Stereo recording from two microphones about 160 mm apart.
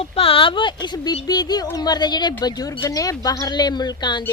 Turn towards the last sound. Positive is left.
turn(degrees=25)  # may be behind; listen again after turning